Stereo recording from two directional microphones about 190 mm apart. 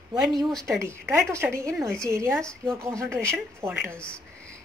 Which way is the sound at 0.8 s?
15° right (ahead or behind).